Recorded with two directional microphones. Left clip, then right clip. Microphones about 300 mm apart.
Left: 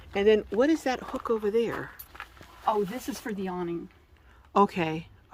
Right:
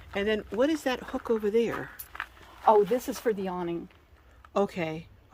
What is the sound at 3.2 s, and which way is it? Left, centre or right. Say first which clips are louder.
Speech: right 2 dB; right.